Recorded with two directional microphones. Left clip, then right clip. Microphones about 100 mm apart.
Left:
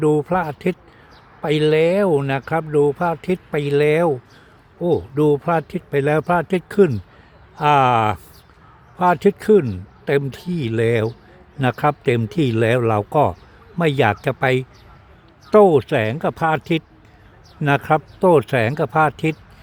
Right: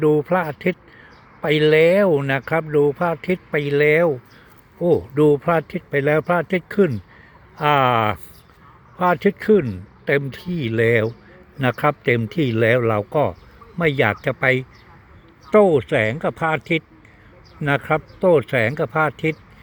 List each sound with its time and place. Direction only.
0.0 s speech: 45° left (ahead or behind)
4.8 s a man's voice: 30° left (ahead or behind); by 14.6 s 65° left (ahead or behind)
15.5 s speech: 90° left
16.1 s speech: 55° left (ahead or behind)
16.5 s speech: 90° left